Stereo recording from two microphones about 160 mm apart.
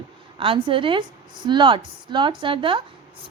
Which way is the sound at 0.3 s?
35° right (ahead or behind).